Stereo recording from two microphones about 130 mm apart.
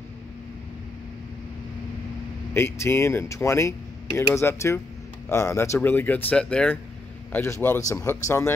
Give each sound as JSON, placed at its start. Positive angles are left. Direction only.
{"t": 2.5, "sound": "speech", "side_deg": 20}
{"t": 7.3, "sound": "speech", "side_deg": 20}